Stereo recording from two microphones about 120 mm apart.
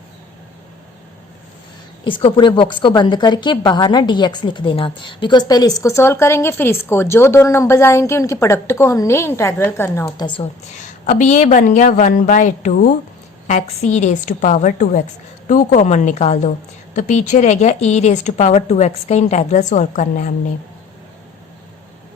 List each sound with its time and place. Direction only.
2.0 s a woman's voice: 45° left (ahead or behind); by 10.1 s 20° left (ahead or behind)
10.2 s a woman's voice: 40° left (ahead or behind)
10.4 s a woman's voice: 90° left
13.5 s a woman's voice: 75° left (ahead or behind)